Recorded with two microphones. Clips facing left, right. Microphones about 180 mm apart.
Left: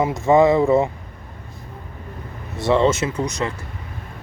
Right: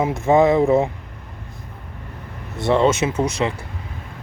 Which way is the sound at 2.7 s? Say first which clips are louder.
Right 1 dB; 20° right (ahead or behind).